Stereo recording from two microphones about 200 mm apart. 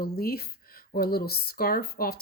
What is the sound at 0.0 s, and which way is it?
Speech, 50° left (ahead or behind).